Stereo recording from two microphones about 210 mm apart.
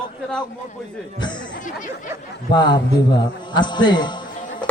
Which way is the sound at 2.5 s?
20° left (ahead or behind).